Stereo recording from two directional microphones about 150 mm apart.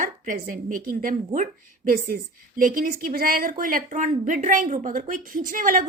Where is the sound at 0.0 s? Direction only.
60° right (ahead or behind).